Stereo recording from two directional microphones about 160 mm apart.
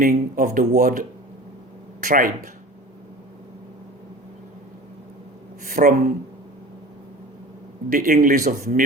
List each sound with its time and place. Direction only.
0.0 s speech: 60° right (ahead or behind)
5.6 s speech: 60° right (ahead or behind)
7.9 s speech: 60° right (ahead or behind)